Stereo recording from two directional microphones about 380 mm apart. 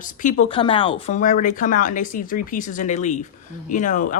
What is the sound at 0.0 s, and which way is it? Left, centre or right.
Speech, centre.